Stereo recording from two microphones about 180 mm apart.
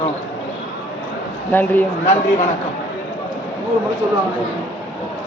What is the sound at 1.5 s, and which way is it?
Speech, 10° left (ahead or behind).